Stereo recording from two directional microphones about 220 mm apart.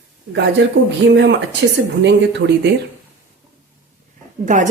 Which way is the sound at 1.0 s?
55° right (ahead or behind).